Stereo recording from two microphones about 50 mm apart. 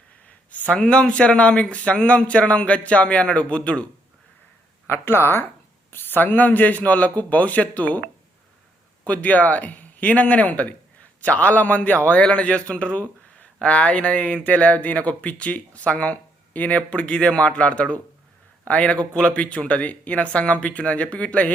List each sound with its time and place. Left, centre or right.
0.3 s speech: left
4.9 s a man's voice: left
9.0 s a man's voice: left